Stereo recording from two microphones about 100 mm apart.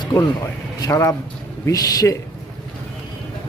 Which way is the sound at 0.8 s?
35° left (ahead or behind).